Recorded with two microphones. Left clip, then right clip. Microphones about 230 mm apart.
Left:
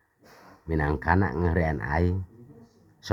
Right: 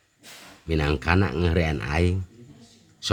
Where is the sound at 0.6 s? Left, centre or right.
Right.